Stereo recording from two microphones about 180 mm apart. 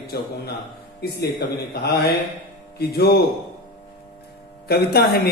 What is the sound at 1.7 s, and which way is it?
A man's voice, 60° left (ahead or behind).